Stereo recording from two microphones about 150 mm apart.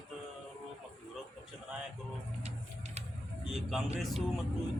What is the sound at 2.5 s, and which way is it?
Vehicle, 45° right (ahead or behind).